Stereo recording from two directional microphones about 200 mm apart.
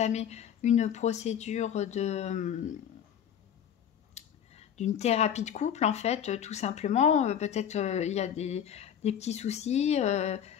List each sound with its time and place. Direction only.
0.0 s speech: 35° left (ahead or behind)
4.1 s speech: 35° left (ahead or behind)